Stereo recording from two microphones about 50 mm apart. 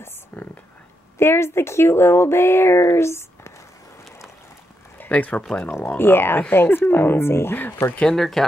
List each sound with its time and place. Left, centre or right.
0.3 s speech: left
1.1 s speech: left
5.1 s speech: left
5.9 s speech: left
8.1 s speech: centre